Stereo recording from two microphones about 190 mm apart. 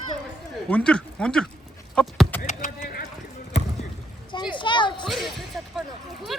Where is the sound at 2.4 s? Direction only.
50° left (ahead or behind).